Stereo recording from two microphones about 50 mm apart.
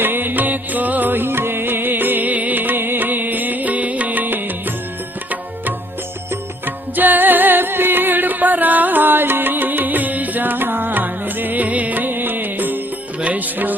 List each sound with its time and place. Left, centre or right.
0.0 s music: right
6.7 s music: right